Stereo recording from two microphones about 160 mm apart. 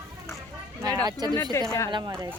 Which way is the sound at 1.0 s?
25° right (ahead or behind).